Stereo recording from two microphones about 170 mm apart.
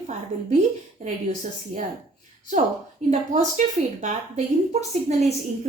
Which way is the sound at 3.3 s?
45° right (ahead or behind).